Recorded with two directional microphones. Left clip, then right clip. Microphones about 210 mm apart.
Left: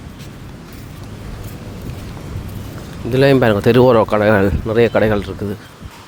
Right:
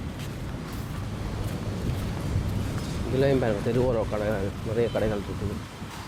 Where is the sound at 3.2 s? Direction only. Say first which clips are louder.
Left 12 dB; 40° left (ahead or behind).